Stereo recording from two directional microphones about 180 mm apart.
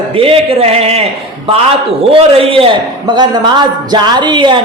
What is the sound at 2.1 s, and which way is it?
A man's voice, 35° right (ahead or behind).